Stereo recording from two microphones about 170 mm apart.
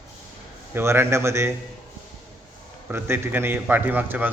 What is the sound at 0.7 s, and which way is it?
Speech, 15° right (ahead or behind).